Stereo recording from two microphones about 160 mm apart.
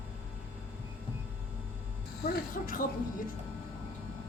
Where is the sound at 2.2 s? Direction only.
65° left (ahead or behind).